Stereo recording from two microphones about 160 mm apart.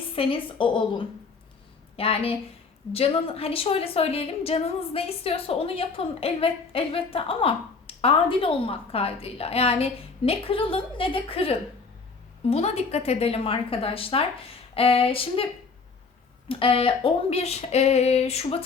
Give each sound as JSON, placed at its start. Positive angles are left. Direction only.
{"t": 0.2, "sound": "a woman's voice", "side_deg": 35}
{"t": 16.5, "sound": "a woman's voice", "side_deg": 35}